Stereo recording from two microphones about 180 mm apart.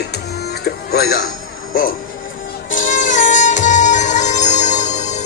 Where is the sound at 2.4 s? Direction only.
50° left (ahead or behind).